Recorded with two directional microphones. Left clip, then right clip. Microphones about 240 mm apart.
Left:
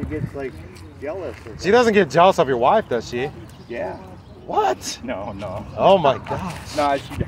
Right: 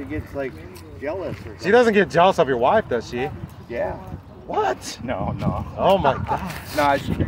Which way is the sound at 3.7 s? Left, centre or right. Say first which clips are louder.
Right 2 dB; right.